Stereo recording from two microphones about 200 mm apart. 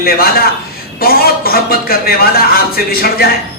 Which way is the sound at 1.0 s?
50° left (ahead or behind).